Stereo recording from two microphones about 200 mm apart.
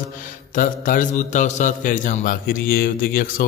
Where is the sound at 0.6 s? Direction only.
40° left (ahead or behind).